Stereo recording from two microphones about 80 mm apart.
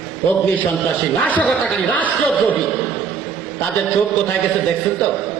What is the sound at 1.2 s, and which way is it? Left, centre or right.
Speech, centre.